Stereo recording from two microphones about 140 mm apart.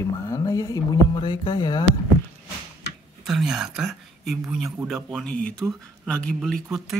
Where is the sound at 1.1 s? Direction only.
35° left (ahead or behind).